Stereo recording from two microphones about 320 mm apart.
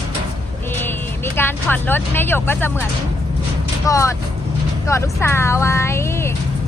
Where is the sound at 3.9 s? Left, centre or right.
Centre.